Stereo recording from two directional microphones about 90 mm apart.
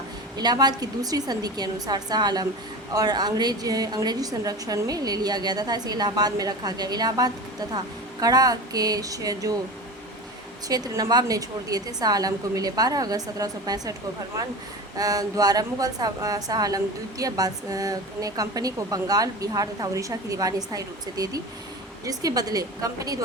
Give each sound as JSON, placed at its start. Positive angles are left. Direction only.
{"t": 0.3, "sound": "a woman's voice", "side_deg": -50}
{"t": 10.7, "sound": "a woman's voice", "side_deg": -45}
{"t": 14.9, "sound": "a woman's voice", "side_deg": -45}